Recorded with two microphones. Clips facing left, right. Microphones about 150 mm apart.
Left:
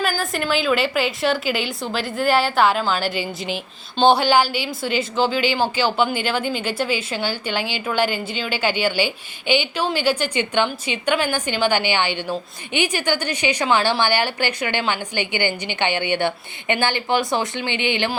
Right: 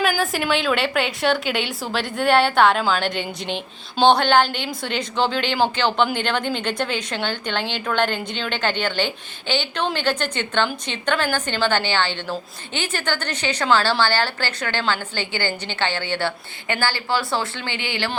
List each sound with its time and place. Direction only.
0.0 s a woman's voice: centre (ahead or behind); by 18.1 s 20° left (ahead or behind)